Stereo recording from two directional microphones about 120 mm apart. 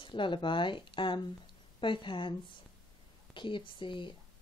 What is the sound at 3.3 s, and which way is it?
Speech, 45° left (ahead or behind).